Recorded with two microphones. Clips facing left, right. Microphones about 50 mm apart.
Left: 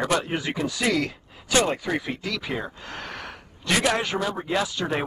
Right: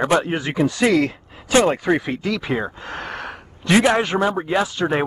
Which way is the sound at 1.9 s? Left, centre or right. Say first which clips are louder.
Right 6 dB; centre.